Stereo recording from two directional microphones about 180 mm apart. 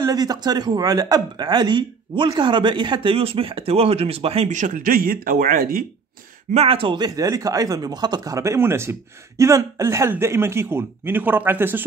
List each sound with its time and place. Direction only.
0.0 s speech: 20° right (ahead or behind); by 5.9 s 55° right (ahead or behind)
6.5 s speech: 35° right (ahead or behind); by 11.8 s 10° right (ahead or behind)